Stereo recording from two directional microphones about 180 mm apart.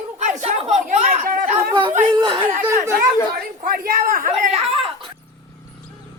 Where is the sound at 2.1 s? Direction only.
25° right (ahead or behind).